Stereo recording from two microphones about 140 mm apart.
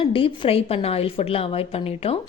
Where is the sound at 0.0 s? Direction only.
40° left (ahead or behind).